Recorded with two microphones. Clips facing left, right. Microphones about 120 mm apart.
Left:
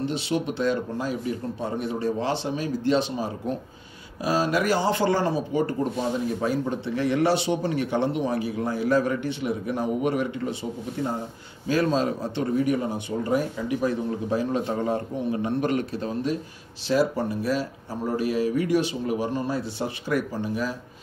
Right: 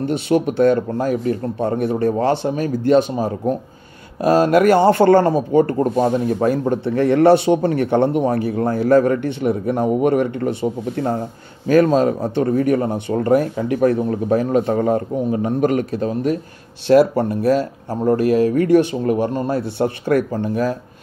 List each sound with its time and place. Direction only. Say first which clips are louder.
0.0 s speech: right 8 dB; 55° right (ahead or behind)
16.8 s speech: right 10 dB; 65° right (ahead or behind)